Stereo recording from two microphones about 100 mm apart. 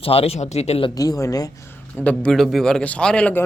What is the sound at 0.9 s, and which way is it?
Speech, 40° left (ahead or behind).